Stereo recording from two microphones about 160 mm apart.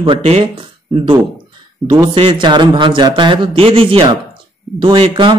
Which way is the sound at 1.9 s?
30° right (ahead or behind).